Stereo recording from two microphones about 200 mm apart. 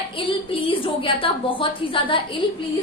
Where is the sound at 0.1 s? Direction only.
25° left (ahead or behind).